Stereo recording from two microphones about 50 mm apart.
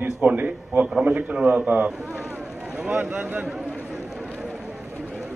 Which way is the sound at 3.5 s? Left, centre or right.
Centre.